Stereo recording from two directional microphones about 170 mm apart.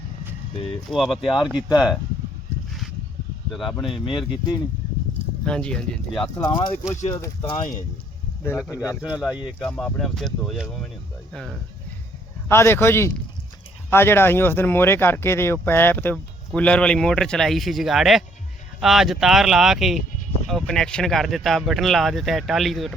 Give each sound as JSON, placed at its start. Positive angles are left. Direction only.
{"t": 0.9, "sound": "speech", "side_deg": 0}
{"t": 3.5, "sound": "speech", "side_deg": 0}
{"t": 3.8, "sound": "speech", "side_deg": 30}
{"t": 5.5, "sound": "speech", "side_deg": 5}
{"t": 6.4, "sound": "speech", "side_deg": 25}
{"t": 8.4, "sound": "speech", "side_deg": 10}
{"t": 9.0, "sound": "speech", "side_deg": -5}
{"t": 9.6, "sound": "speech", "side_deg": 5}
{"t": 12.5, "sound": "speech", "side_deg": 15}